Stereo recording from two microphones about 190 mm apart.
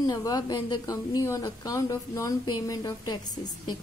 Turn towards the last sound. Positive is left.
turn(degrees=20)  # may be behind; listen again after turning